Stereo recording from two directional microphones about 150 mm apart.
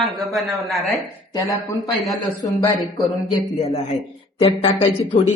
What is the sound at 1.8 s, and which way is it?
Speech, centre (ahead or behind).